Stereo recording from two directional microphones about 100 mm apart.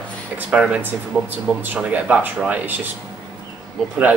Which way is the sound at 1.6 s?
15° right (ahead or behind).